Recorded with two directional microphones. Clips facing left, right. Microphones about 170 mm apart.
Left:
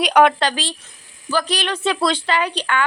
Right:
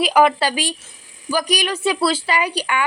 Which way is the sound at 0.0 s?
5° right (ahead or behind).